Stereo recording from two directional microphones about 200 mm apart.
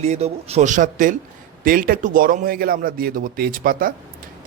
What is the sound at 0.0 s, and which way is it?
A man's voice, 35° right (ahead or behind).